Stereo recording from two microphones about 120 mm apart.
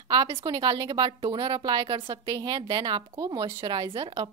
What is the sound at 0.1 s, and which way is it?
A woman's voice, 40° right (ahead or behind).